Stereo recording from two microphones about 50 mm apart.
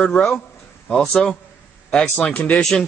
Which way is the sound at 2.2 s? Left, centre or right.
Left.